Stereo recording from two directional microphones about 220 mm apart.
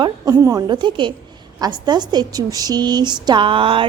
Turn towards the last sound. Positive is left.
turn(degrees=-25)  # may be behind; listen again after turning